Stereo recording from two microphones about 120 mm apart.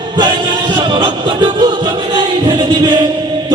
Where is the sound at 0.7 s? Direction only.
35° right (ahead or behind).